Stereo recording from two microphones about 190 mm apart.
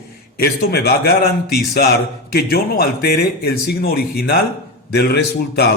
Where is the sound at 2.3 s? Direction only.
55° left (ahead or behind).